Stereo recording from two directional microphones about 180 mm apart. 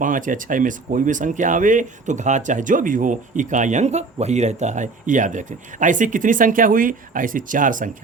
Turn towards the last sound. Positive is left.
turn(degrees=-45)  # may be behind; listen again after turning